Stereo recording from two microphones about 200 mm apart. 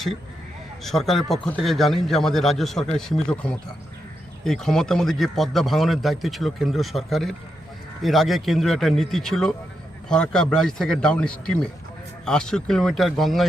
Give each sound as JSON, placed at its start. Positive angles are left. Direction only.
{"t": 0.9, "sound": "a man's voice", "side_deg": 0}